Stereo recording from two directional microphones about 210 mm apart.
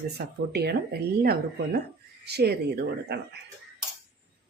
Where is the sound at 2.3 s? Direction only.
50° right (ahead or behind).